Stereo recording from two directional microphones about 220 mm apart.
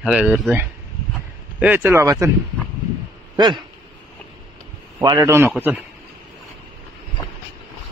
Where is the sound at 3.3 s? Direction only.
20° right (ahead or behind).